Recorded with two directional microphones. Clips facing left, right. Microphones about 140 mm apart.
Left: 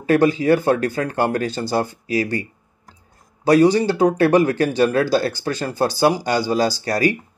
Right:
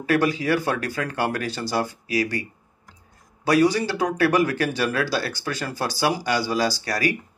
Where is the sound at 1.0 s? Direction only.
40° left (ahead or behind).